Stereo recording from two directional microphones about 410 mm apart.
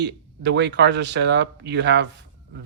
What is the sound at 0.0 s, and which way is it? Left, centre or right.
A man's voice, right.